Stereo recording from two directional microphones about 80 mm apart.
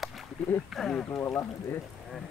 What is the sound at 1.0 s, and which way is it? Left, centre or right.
Speech, left.